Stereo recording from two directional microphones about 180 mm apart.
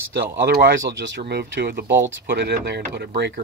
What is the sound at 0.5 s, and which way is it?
Speech, 65° right (ahead or behind).